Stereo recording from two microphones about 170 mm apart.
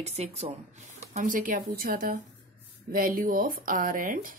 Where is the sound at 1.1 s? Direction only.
50° right (ahead or behind).